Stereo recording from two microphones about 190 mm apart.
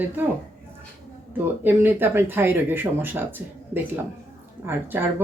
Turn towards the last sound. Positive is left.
turn(degrees=-10)  # may be behind; listen again after turning